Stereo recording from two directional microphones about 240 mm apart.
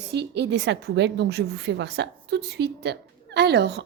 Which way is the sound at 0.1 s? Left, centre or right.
Right.